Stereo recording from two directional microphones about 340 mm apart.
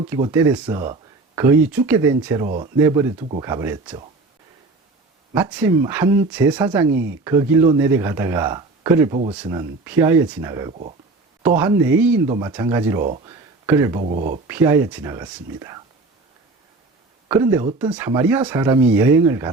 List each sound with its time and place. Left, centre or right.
0.1 s speech: centre
5.3 s speech: centre
11.4 s speech: centre
13.0 s speech: right
13.2 s a sound: centre
14.2 s speech: right
14.4 s speech: centre
17.2 s speech: centre